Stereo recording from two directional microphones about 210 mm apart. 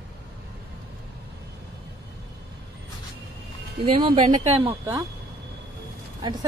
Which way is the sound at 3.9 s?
25° right (ahead or behind).